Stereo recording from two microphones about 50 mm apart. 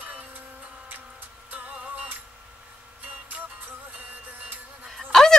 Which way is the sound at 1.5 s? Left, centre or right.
Right.